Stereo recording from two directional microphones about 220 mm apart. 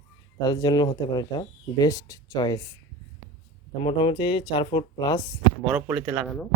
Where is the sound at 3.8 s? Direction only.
25° left (ahead or behind).